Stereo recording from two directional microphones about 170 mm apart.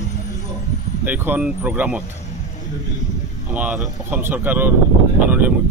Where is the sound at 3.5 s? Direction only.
10° right (ahead or behind).